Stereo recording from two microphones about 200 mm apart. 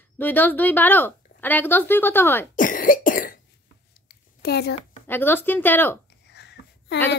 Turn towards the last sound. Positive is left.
turn(degrees=60)  # may be behind; listen again after turning